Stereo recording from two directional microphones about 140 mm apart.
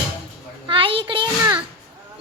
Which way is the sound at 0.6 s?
40° right (ahead or behind).